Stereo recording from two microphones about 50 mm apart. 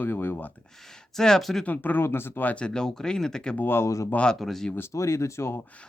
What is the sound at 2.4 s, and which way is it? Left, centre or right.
Speech, left.